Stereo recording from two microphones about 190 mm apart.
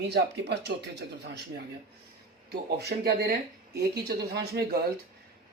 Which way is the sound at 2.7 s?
55° right (ahead or behind).